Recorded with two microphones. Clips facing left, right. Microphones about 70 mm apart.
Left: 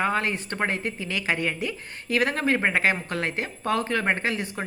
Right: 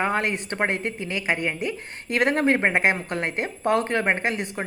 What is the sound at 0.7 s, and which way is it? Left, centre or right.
A woman's voice, right.